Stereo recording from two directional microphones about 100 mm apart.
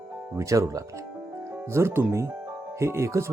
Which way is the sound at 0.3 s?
30° right (ahead or behind).